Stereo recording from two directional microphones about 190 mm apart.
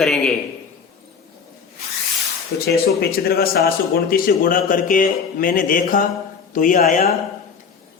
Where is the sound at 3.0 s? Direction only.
55° left (ahead or behind).